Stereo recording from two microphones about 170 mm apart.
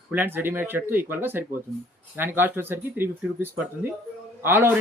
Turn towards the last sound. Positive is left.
turn(degrees=-10)  # may be behind; listen again after turning